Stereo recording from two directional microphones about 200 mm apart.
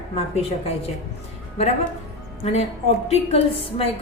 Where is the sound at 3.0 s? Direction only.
30° left (ahead or behind).